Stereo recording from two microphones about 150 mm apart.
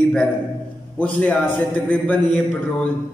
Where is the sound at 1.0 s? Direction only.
10° left (ahead or behind).